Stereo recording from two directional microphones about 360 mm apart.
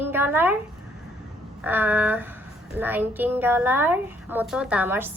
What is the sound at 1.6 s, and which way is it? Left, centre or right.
A woman's voice, centre.